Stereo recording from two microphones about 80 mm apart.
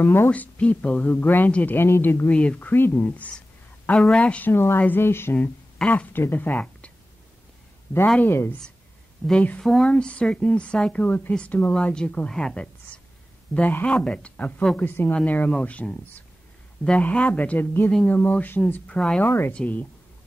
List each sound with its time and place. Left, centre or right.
0.0 s speech: left
0.3 s speech: centre
2.3 s speech: centre
2.7 s speech: left
3.1 s a sound: centre
3.9 s a woman's voice: centre
4.2 s speech: centre
4.5 s speech: left
5.9 s speech: centre
8.2 s speech: left
9.6 s speech: centre
13.6 s speech: left
19.2 s speech: left
19.5 s speech: centre